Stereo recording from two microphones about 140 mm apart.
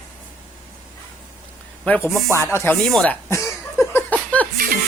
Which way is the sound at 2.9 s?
5° left (ahead or behind).